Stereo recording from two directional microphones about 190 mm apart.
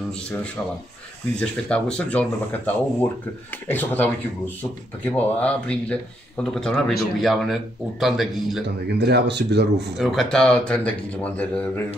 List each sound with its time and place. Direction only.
1.4 s speech: 5° left (ahead or behind)
8.6 s speech: 60° right (ahead or behind)
9.9 s speech: centre (ahead or behind)